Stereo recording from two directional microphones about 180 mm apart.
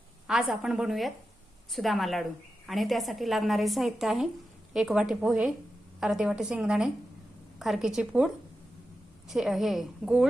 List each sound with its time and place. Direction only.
0.3 s a woman's voice: 5° right (ahead or behind)
9.3 s a woman's voice: centre (ahead or behind)